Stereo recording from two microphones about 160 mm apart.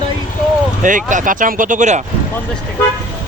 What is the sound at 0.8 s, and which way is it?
Speech, 55° right (ahead or behind).